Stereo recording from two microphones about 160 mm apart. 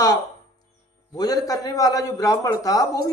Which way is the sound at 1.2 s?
25° left (ahead or behind).